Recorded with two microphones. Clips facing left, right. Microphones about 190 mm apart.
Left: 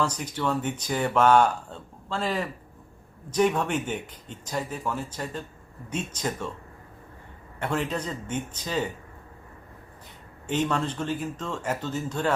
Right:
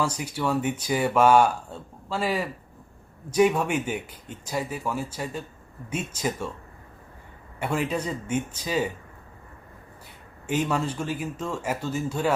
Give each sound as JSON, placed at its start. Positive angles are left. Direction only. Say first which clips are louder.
{"t": 0.0, "sound": "speech", "louder": "right 1 dB", "side_deg": -10}
{"t": 7.6, "sound": "speech", "louder": "right 2 dB", "side_deg": -10}
{"t": 10.4, "sound": "speech", "louder": "right 1 dB", "side_deg": -10}